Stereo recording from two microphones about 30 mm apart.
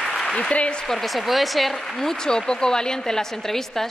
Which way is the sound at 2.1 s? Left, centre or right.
Left.